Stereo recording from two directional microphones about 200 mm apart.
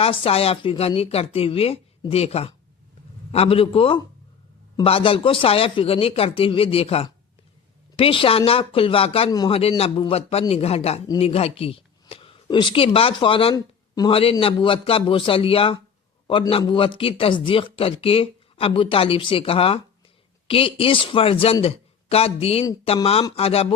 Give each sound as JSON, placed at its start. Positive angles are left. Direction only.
{"t": 0.0, "sound": "speech", "side_deg": 30}